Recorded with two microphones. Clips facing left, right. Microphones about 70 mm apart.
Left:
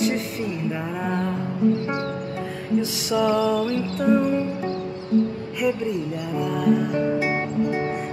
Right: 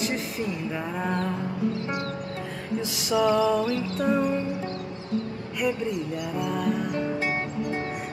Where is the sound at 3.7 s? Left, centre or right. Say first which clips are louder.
Left 2 dB; left.